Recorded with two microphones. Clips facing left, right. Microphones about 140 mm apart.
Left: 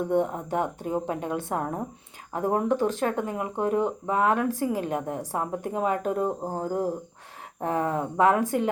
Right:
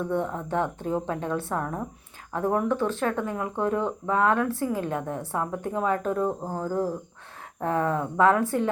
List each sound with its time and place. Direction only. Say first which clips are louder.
0.1 s speech: left 2 dB; 15° left (ahead or behind)